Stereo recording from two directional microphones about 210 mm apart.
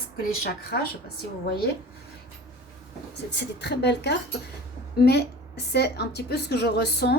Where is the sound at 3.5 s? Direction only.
55° left (ahead or behind).